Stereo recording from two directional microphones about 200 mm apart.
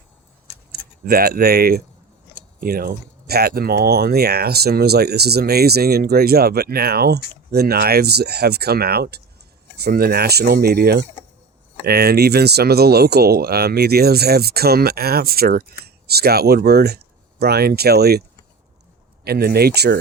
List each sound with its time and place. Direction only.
0.7 s speech: 50° right (ahead or behind)
19.2 s speech: 50° right (ahead or behind)